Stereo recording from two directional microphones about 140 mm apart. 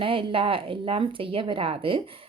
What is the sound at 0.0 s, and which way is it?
Speech, 40° right (ahead or behind).